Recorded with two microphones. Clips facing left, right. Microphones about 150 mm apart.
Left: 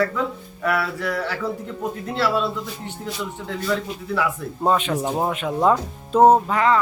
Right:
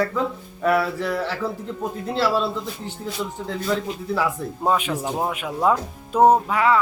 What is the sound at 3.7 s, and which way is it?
Speech, 30° right (ahead or behind).